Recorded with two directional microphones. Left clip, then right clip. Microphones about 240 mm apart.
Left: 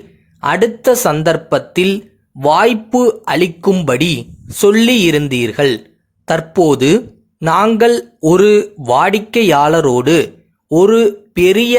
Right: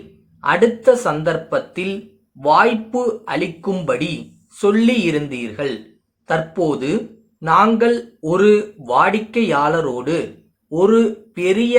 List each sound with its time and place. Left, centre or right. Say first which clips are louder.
0.4 s a man's voice: left 2 dB; left